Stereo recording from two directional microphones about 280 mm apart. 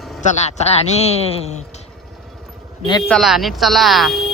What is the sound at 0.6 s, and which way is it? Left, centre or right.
Speech, left.